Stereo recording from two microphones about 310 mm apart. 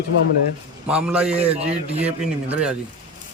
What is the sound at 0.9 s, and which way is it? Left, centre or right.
Speech, centre.